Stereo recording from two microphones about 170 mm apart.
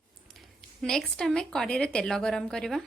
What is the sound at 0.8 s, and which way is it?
A woman's voice, centre (ahead or behind).